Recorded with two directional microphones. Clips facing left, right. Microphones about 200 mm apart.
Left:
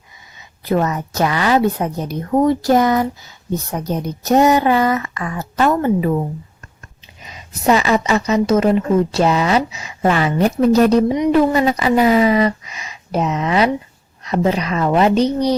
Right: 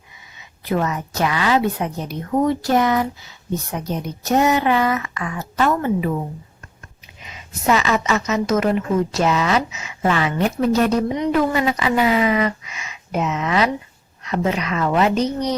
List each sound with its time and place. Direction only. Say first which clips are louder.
0.7 s a woman's voice: left 4 dB; 40° left (ahead or behind)
7.3 s a woman's voice: left 4 dB; 35° left (ahead or behind)